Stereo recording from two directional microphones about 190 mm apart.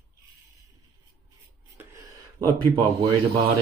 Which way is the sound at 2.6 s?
25° right (ahead or behind).